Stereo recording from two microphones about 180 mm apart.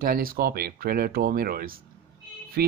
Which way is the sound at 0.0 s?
55° right (ahead or behind).